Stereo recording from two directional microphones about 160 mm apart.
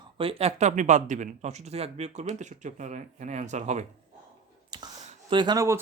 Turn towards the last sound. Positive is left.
turn(degrees=-20)  # may be behind; listen again after turning